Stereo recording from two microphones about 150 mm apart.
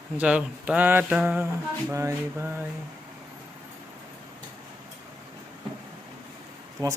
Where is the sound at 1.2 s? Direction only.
5° right (ahead or behind).